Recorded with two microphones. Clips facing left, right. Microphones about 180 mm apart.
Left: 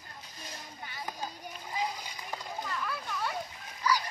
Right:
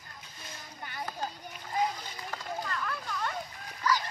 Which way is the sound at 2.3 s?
5° left (ahead or behind).